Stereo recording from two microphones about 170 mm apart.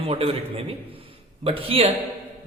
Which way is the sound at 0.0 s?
35° right (ahead or behind).